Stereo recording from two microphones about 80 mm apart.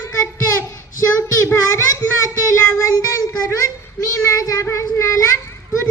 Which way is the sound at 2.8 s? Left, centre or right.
Left.